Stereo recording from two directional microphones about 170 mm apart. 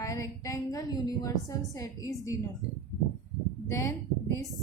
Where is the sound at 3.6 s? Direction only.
20° left (ahead or behind).